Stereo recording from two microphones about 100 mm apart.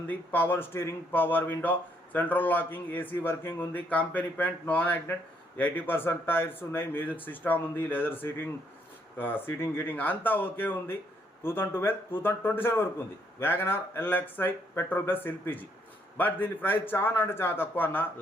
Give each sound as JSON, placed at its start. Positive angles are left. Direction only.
{"t": 0.1, "sound": "speech", "side_deg": 20}